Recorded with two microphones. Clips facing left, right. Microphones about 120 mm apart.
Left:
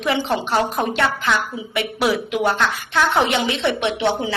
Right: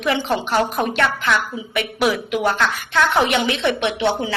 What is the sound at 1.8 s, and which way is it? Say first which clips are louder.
A woman's voice: even; 25° left (ahead or behind).